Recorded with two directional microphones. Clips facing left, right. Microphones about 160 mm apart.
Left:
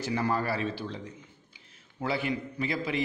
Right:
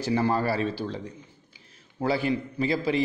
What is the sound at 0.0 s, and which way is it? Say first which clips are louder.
A man's voice: right 5 dB; 30° right (ahead or behind).